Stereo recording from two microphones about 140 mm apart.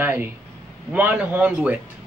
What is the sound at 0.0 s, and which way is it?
Speech, 15° right (ahead or behind).